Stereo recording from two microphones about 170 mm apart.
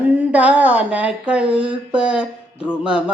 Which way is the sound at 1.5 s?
5° right (ahead or behind).